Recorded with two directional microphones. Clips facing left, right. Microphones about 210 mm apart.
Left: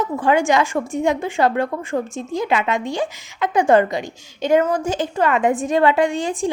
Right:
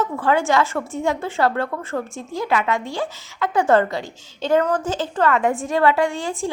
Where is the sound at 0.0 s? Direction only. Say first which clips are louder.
Left 2 dB; 15° left (ahead or behind).